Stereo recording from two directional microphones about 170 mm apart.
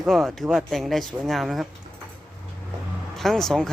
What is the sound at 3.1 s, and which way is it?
Speech, centre (ahead or behind).